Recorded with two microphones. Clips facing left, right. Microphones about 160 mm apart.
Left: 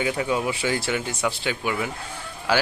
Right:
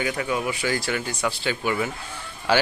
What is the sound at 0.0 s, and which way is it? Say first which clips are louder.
Speech: left 2 dB; 25° left (ahead or behind).